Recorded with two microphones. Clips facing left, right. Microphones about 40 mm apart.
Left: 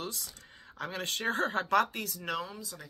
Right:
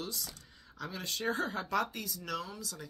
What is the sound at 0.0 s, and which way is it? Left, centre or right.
Speech, left.